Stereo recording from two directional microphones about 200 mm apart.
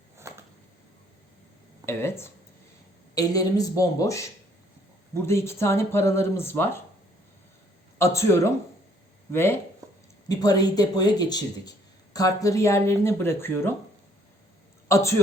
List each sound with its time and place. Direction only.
0.2 s a sound: 15° right (ahead or behind)
1.9 s speech: 10° left (ahead or behind)
7.9 s speech: 15° left (ahead or behind)
9.8 s a sound: 15° right (ahead or behind)
10.2 s speech: 20° left (ahead or behind)
14.8 s a woman's voice: 15° left (ahead or behind)